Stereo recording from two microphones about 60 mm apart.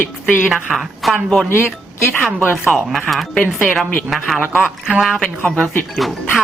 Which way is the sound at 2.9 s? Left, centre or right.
Centre.